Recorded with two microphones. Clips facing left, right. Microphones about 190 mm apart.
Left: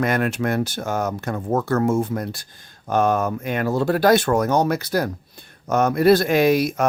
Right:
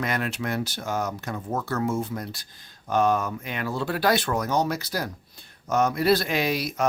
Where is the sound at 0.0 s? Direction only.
50° left (ahead or behind).